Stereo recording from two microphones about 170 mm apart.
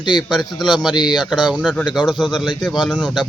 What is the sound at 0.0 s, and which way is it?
Speech, 25° left (ahead or behind).